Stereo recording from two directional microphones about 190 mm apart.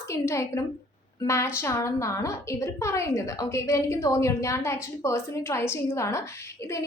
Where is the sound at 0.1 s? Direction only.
15° left (ahead or behind).